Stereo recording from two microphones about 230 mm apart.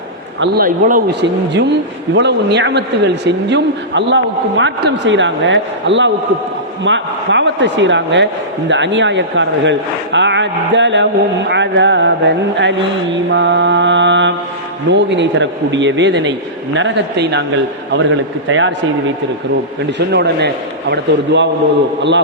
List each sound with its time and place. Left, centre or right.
0.3 s a man's voice: right
20.1 s a man's voice: right